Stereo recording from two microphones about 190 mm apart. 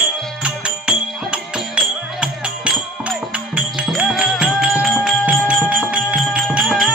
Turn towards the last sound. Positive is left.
turn(degrees=0)  # may be behind; listen again after turning